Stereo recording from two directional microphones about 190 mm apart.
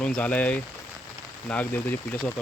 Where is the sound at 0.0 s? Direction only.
5° left (ahead or behind).